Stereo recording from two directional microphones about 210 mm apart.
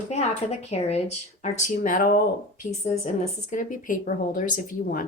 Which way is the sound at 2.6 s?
30° left (ahead or behind).